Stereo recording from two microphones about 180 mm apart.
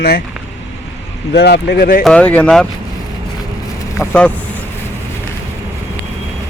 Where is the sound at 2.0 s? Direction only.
5° left (ahead or behind).